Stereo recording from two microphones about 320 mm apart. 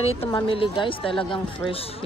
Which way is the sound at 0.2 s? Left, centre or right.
Centre.